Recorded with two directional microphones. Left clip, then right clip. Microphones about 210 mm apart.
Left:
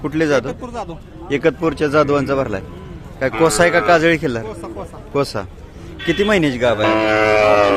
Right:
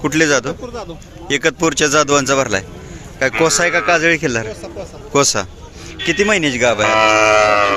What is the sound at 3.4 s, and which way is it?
Speech, 10° left (ahead or behind).